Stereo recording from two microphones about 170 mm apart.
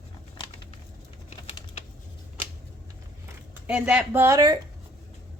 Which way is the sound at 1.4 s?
35° left (ahead or behind).